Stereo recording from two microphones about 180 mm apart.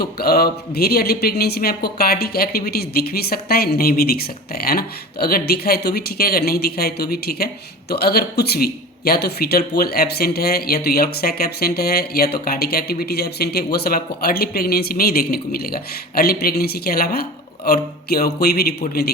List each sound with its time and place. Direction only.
0.0 s speech: 60° left (ahead or behind)